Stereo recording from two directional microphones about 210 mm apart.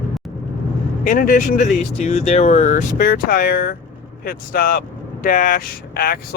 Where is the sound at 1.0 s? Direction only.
40° left (ahead or behind).